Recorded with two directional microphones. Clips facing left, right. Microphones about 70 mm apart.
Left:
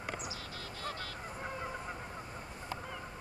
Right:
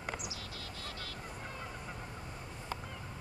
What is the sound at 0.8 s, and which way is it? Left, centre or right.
Goose, left.